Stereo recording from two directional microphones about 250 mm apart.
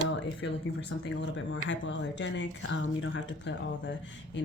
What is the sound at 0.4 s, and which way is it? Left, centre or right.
Speech, left.